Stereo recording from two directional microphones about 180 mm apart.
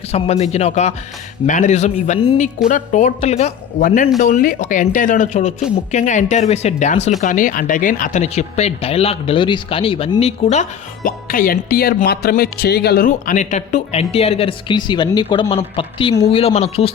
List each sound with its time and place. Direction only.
0.1 s speech: 35° left (ahead or behind)
3.8 s speech: 50° left (ahead or behind)
13.1 s speech: 45° left (ahead or behind)